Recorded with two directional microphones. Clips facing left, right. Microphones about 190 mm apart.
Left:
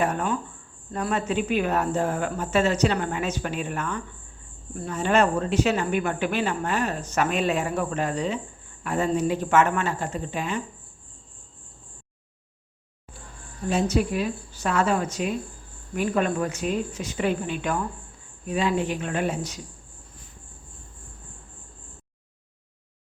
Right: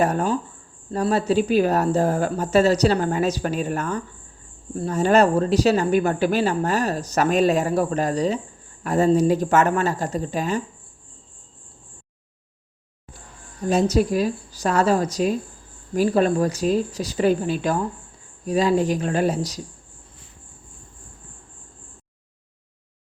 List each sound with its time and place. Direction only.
0.0 s speech: 40° right (ahead or behind)
13.7 s speech: 40° right (ahead or behind)